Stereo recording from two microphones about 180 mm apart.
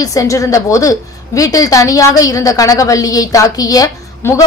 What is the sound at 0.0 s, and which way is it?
A woman's voice, 20° left (ahead or behind).